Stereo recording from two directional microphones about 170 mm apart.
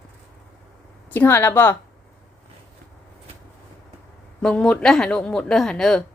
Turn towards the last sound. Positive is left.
turn(degrees=5)  # may be behind; listen again after turning